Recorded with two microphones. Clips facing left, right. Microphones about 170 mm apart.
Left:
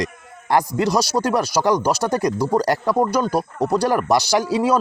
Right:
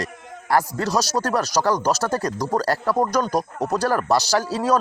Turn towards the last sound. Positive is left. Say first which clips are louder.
# left 3 dB
turn(degrees=15)  # may be behind; listen again after turning